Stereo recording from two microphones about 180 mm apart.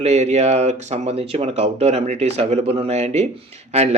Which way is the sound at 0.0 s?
35° right (ahead or behind).